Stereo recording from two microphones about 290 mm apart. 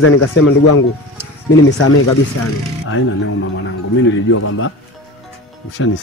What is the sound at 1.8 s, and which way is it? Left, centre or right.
Speech, left.